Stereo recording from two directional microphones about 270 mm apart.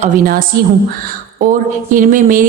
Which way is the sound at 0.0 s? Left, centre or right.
Right.